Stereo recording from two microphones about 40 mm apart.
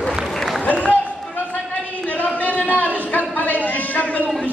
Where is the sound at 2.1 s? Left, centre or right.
Left.